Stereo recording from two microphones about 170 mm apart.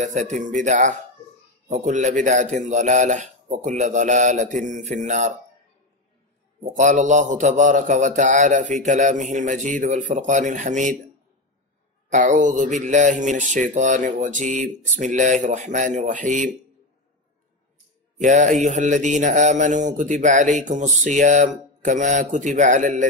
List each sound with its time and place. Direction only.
0.0 s a man's voice: 50° right (ahead or behind)
6.6 s a man's voice: 50° right (ahead or behind)
12.1 s a man's voice: 45° right (ahead or behind)
18.2 s a man's voice: 45° right (ahead or behind)